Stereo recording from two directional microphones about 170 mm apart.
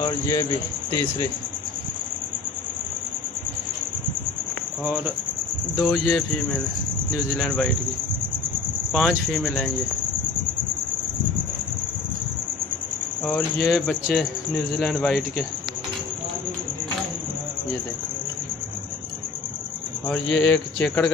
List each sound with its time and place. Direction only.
0.0 s speech: 20° left (ahead or behind)
5.8 s speech: centre (ahead or behind)
7.3 s speech: 5° left (ahead or behind)
8.9 s speech: centre (ahead or behind)
13.2 s speech: 5° left (ahead or behind)
20.1 s speech: 5° left (ahead or behind)